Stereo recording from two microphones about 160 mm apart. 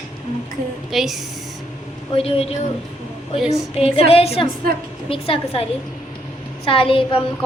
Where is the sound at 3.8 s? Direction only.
40° left (ahead or behind).